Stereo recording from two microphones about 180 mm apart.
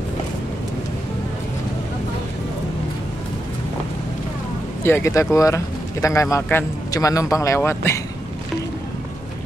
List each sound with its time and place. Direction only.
4.8 s speech: 15° left (ahead or behind)